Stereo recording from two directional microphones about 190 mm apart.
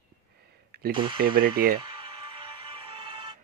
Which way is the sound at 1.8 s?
25° right (ahead or behind).